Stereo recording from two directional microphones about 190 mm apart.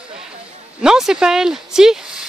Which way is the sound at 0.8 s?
5° right (ahead or behind).